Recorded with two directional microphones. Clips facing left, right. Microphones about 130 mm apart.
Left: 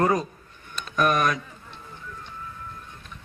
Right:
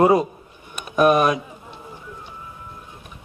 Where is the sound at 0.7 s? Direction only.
15° right (ahead or behind).